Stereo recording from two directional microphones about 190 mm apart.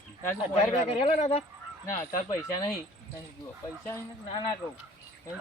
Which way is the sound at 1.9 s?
15° left (ahead or behind).